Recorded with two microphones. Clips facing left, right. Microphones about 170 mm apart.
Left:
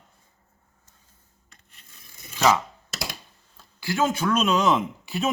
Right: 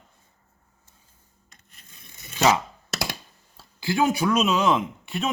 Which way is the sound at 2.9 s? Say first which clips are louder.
Right 4 dB; 75° right (ahead or behind).